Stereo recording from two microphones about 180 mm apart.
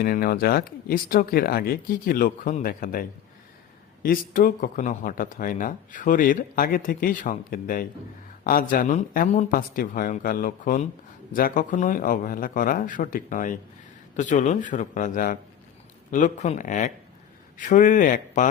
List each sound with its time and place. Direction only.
0.0 s speech: 55° left (ahead or behind)